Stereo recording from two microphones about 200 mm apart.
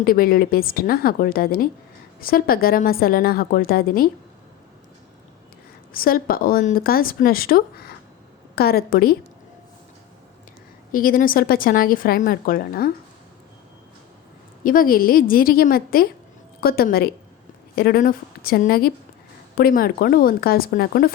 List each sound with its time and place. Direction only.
0.0 s speech: 45° left (ahead or behind)
5.9 s speech: 45° left (ahead or behind)
10.9 s speech: 45° left (ahead or behind)
14.6 s speech: 45° left (ahead or behind)